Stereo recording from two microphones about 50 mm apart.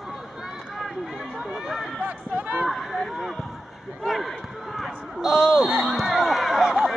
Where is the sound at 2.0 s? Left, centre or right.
Right.